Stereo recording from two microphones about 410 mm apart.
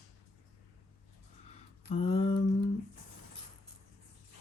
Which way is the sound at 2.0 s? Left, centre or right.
Centre.